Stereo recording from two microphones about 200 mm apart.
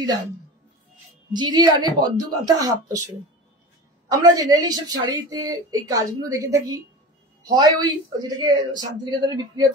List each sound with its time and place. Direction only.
1.3 s speech: 20° right (ahead or behind)
4.2 s a woman's voice: 20° right (ahead or behind)